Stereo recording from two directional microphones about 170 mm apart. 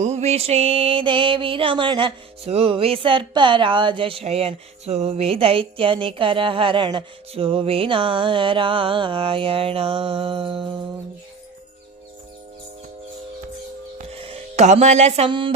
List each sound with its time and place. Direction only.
0.0 s music: 40° right (ahead or behind)
14.2 s speech: 40° right (ahead or behind)